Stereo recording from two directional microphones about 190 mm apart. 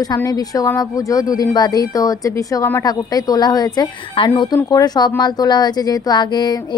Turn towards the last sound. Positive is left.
turn(degrees=20)  # may be behind; listen again after turning